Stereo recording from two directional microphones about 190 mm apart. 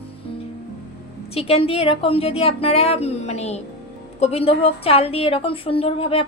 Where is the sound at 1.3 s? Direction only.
30° left (ahead or behind).